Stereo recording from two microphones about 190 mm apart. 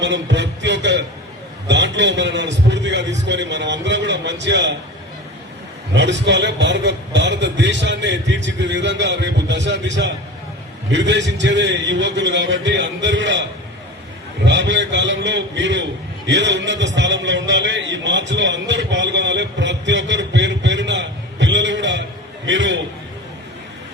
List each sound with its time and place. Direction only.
0.0 s a sound: 70° right (ahead or behind)
1.6 s a man's voice: 70° right (ahead or behind)
5.9 s a man's voice: 70° right (ahead or behind)
14.4 s a man's voice: 70° right (ahead or behind)